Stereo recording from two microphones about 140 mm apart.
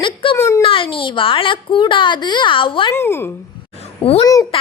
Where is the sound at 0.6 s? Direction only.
40° left (ahead or behind).